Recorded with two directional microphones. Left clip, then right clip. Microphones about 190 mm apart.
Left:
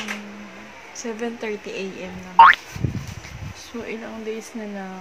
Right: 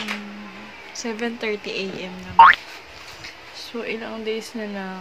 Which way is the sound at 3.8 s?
5° right (ahead or behind).